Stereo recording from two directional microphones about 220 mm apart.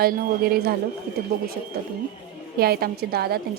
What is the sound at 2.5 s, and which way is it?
Speech, 45° right (ahead or behind).